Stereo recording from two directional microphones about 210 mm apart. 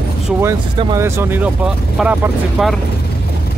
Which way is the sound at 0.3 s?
10° right (ahead or behind).